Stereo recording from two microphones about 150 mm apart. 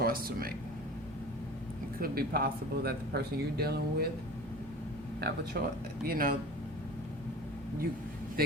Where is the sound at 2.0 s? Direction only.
90° right.